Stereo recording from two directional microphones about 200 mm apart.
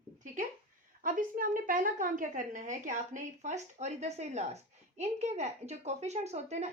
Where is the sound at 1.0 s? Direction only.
45° right (ahead or behind).